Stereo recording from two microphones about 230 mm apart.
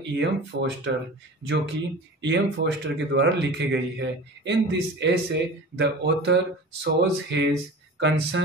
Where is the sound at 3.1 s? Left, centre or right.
Right.